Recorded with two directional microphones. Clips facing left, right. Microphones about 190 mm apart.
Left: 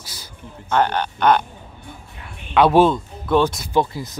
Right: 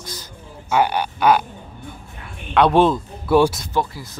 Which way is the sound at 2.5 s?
Centre (ahead or behind).